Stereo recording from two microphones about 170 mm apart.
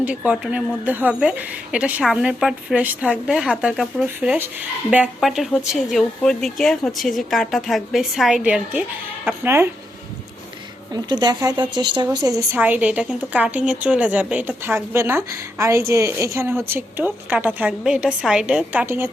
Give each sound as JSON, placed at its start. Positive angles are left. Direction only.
{"t": 0.3, "sound": "a woman's voice", "side_deg": -10}
{"t": 10.9, "sound": "a woman's voice", "side_deg": -25}